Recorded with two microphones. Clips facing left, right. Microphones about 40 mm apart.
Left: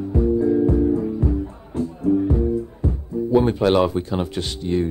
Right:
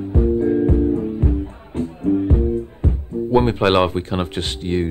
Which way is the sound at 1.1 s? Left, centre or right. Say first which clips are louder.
Right 1 dB; right.